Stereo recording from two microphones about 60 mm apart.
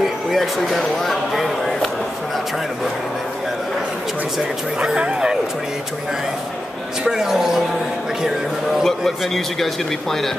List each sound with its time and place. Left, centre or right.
0.0 s speech: centre
4.7 s speech: centre
7.1 s speech: centre
8.8 s a man's voice: centre